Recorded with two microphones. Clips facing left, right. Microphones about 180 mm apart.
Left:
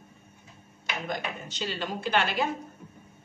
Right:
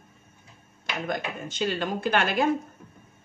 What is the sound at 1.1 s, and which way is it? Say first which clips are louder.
Speech: right 3 dB; 50° right (ahead or behind).